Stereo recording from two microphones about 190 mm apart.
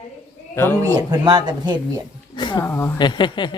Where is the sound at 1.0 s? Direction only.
20° right (ahead or behind).